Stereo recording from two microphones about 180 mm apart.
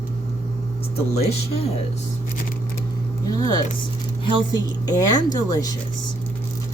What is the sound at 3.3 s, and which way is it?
Speech, 20° left (ahead or behind).